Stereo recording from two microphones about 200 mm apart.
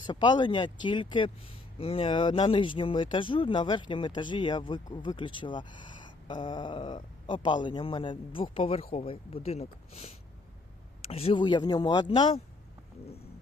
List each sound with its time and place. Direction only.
0.1 s speech: 20° left (ahead or behind)
11.1 s speech: 30° left (ahead or behind)